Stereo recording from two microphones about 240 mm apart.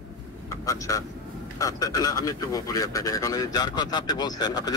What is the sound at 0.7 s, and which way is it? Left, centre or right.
A man's voice, centre.